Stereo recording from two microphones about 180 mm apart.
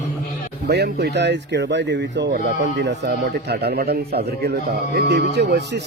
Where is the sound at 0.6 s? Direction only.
65° right (ahead or behind).